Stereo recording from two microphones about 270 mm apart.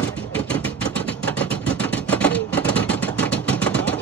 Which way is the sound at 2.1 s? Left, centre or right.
Centre.